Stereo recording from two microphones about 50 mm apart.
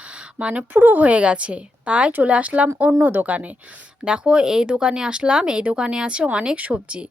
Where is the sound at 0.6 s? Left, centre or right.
Right.